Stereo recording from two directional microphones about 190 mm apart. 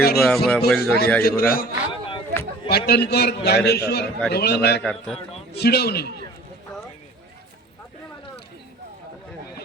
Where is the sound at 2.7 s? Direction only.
60° left (ahead or behind).